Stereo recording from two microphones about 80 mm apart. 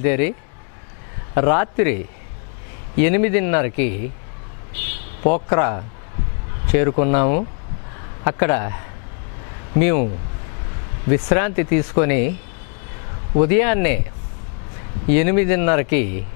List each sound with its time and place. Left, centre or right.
0.0 s speech: centre
1.3 s speech: centre
3.0 s speech: centre
5.2 s speech: left
9.8 s speech: centre
11.1 s speech: centre
13.4 s speech: centre
15.0 s speech: centre